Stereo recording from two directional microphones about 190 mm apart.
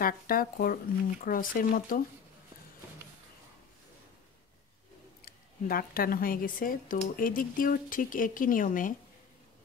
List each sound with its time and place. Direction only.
0.0 s speech: 50° left (ahead or behind)
5.2 s speech: 50° left (ahead or behind)